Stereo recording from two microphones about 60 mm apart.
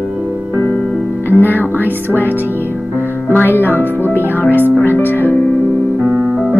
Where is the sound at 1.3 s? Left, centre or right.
Left.